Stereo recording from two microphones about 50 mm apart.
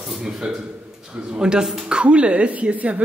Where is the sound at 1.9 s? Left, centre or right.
Right.